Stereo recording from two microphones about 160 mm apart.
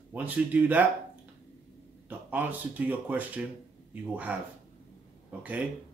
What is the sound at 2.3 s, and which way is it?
Speech, 10° right (ahead or behind).